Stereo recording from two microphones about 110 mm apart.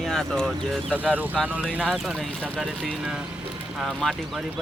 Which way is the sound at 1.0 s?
15° right (ahead or behind).